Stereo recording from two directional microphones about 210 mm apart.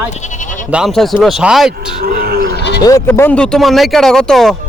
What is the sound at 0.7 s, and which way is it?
Speech, centre (ahead or behind).